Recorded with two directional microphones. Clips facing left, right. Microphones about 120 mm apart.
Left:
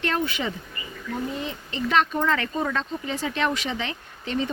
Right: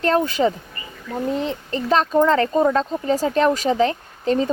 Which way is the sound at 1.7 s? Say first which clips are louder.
Right 5 dB; 40° right (ahead or behind).